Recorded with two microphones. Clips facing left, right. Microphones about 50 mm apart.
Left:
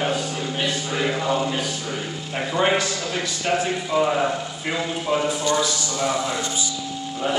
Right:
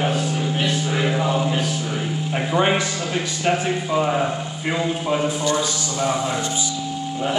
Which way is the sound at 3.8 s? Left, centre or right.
Centre.